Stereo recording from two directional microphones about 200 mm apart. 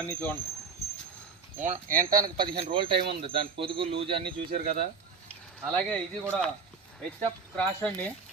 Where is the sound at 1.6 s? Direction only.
40° right (ahead or behind).